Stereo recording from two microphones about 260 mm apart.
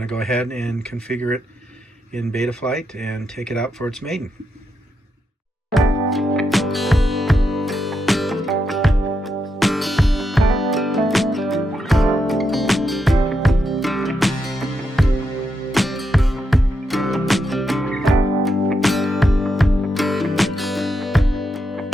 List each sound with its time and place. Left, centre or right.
0.0 s speech: centre
5.7 s music: centre